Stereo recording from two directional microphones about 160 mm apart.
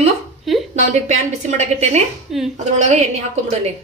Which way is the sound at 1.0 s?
45° right (ahead or behind).